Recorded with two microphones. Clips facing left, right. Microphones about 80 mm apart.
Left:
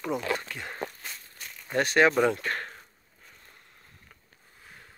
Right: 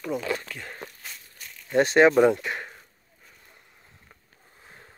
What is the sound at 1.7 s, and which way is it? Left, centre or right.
Speech, right.